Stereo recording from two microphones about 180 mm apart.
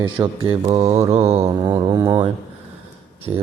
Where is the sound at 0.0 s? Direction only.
25° right (ahead or behind).